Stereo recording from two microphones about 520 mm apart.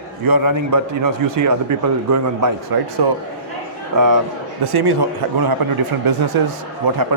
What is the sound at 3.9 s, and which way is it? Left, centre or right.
A man's voice, right.